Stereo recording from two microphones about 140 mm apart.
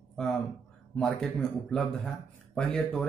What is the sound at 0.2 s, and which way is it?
Speech, 5° left (ahead or behind).